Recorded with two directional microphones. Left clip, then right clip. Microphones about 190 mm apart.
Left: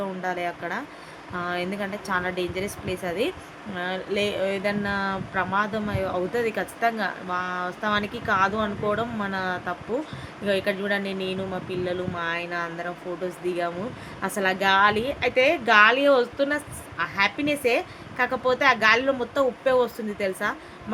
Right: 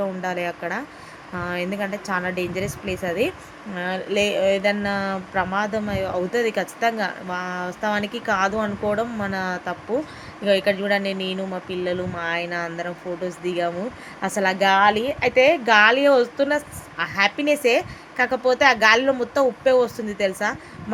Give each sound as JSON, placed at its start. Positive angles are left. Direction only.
{"t": 0.2, "sound": "speech", "side_deg": -20}